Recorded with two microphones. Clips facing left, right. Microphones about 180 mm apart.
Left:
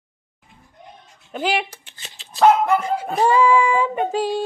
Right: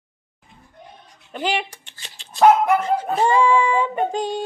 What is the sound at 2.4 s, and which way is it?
Dog, 15° right (ahead or behind).